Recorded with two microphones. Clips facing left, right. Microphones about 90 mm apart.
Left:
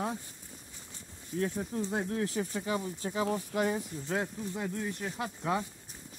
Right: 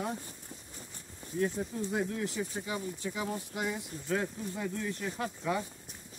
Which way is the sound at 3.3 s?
55° left (ahead or behind).